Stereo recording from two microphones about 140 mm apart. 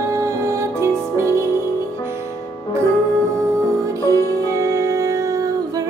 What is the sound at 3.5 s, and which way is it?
Music, 20° right (ahead or behind).